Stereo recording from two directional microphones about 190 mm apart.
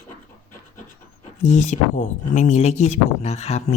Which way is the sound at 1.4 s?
40° left (ahead or behind).